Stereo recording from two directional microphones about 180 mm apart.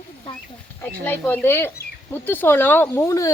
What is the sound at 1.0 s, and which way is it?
Speech, 10° left (ahead or behind).